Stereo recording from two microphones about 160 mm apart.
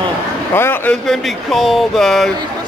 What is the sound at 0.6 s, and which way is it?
Speech, 15° left (ahead or behind).